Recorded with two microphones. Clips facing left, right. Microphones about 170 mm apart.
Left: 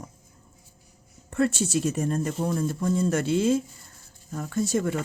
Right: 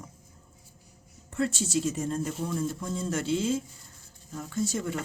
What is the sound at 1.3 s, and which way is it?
A woman's voice, 65° left (ahead or behind).